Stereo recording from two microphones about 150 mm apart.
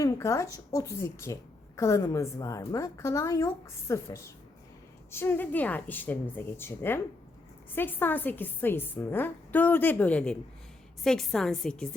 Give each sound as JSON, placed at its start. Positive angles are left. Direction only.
{"t": 0.0, "sound": "a woman's voice", "side_deg": 20}